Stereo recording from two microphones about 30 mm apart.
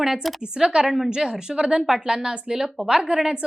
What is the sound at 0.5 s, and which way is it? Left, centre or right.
A woman's voice, right.